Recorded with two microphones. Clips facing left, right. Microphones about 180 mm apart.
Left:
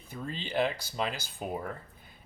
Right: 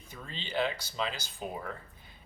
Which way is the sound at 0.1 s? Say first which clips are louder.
Left 4 dB; 50° left (ahead or behind).